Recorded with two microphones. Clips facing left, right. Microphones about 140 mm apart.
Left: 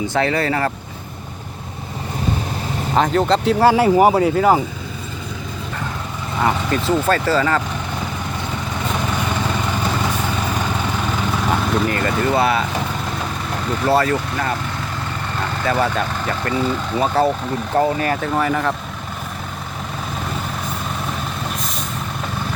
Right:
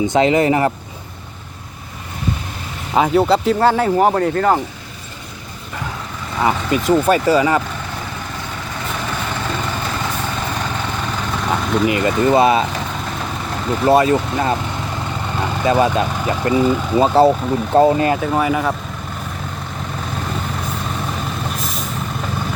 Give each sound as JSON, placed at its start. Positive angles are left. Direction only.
{"t": 0.1, "sound": "speech", "side_deg": -20}
{"t": 2.9, "sound": "speech", "side_deg": -5}
{"t": 6.4, "sound": "speech", "side_deg": -5}
{"t": 11.9, "sound": "speech", "side_deg": -15}
{"t": 13.8, "sound": "speech", "side_deg": -15}
{"t": 17.0, "sound": "speech", "side_deg": -25}
{"t": 18.1, "sound": "speech", "side_deg": -10}
{"t": 21.5, "sound": "vehicle", "side_deg": 0}